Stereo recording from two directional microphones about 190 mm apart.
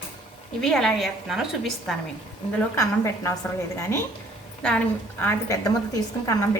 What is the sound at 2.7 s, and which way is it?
A woman's voice, 15° left (ahead or behind).